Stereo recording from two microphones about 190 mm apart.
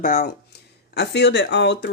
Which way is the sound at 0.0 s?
50° left (ahead or behind).